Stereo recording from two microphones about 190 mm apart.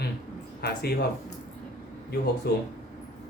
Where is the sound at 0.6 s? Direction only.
55° left (ahead or behind).